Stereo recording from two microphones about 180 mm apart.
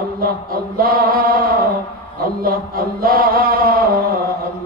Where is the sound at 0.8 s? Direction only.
55° right (ahead or behind).